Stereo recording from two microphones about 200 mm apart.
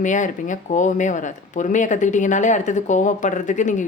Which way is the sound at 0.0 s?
40° left (ahead or behind).